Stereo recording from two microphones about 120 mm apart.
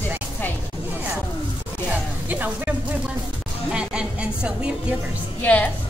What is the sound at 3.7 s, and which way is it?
Speech, 5° right (ahead or behind).